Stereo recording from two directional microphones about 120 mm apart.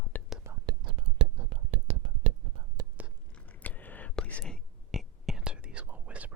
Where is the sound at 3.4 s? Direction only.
15° left (ahead or behind).